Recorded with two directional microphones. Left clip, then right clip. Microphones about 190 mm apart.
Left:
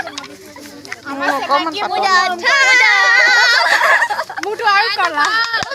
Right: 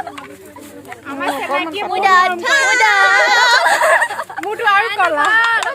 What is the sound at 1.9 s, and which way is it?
Speech, 70° right (ahead or behind).